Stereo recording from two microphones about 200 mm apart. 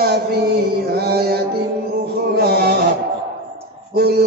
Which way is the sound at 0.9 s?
50° right (ahead or behind).